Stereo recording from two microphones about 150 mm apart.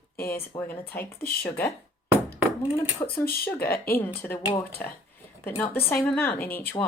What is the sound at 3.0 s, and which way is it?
Speech, 25° left (ahead or behind).